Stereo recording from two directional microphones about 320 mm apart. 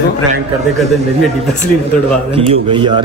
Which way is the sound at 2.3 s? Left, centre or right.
Centre.